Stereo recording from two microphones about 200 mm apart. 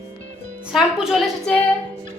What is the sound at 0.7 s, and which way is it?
Speech, centre (ahead or behind).